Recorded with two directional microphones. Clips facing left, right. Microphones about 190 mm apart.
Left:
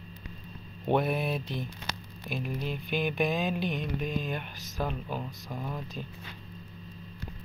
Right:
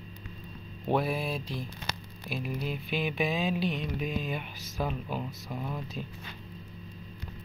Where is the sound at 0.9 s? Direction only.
Centre (ahead or behind).